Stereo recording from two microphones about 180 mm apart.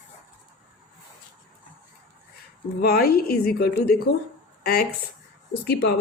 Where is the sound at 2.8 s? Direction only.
55° left (ahead or behind).